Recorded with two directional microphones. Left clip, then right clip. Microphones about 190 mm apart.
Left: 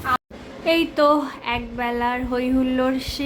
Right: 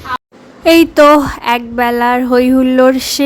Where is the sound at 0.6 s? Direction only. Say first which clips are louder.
Right 11 dB; 55° right (ahead or behind).